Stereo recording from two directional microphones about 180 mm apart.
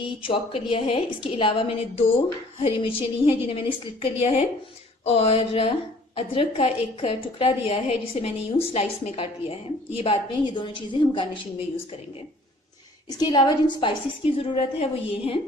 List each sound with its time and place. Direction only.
0.0 s a woman's voice: 30° left (ahead or behind)
13.1 s a woman's voice: 20° left (ahead or behind)